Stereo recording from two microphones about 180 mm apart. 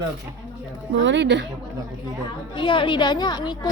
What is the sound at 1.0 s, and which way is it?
Speech, 80° right.